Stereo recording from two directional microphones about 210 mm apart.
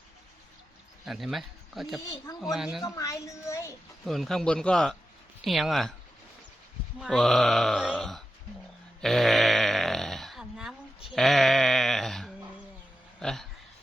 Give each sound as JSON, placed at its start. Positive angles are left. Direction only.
{"t": 1.0, "sound": "speech", "side_deg": 0}
{"t": 2.0, "sound": "a woman's voice", "side_deg": 15}
{"t": 2.4, "sound": "grunt", "side_deg": 0}
{"t": 2.8, "sound": "a woman's voice", "side_deg": 15}
{"t": 4.0, "sound": "grunt", "side_deg": 0}
{"t": 7.0, "sound": "grunt", "side_deg": 0}
{"t": 9.0, "sound": "a sound", "side_deg": 0}